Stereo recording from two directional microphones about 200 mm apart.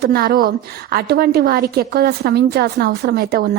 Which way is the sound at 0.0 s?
50° right (ahead or behind).